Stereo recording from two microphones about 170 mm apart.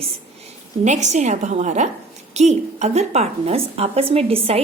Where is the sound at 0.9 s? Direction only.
45° right (ahead or behind).